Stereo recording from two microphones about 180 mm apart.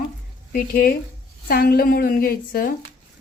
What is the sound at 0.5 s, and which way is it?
A woman's voice, 55° left (ahead or behind).